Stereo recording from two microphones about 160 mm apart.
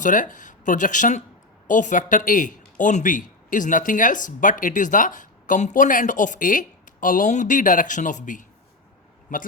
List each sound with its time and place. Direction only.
0.0 s speech: 55° left (ahead or behind)